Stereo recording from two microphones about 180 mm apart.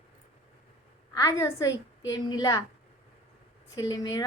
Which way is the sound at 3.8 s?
20° left (ahead or behind).